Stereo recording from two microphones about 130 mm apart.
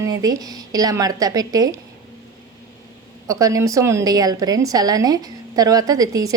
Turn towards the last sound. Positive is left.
turn(degrees=-25)  # may be behind; listen again after turning